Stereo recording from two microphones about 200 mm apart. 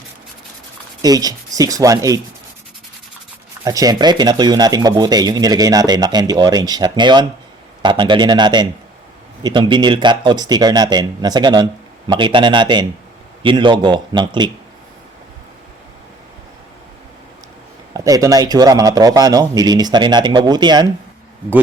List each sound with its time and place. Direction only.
1.0 s speech: 20° right (ahead or behind)
3.6 s speech: 20° right (ahead or behind)
17.9 s speech: 15° right (ahead or behind)